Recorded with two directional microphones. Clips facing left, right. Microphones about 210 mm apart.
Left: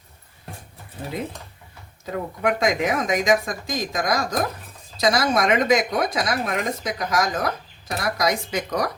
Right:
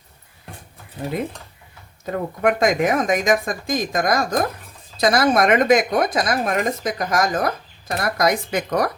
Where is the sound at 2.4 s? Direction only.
50° right (ahead or behind).